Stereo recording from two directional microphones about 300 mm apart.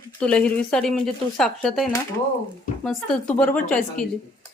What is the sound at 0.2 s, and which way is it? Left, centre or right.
Speech, centre.